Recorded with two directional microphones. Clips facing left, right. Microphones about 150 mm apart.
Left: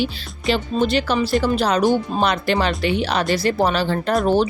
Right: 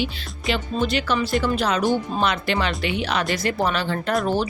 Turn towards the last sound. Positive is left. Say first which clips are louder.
# left 4 dB
turn(degrees=25)  # may be behind; listen again after turning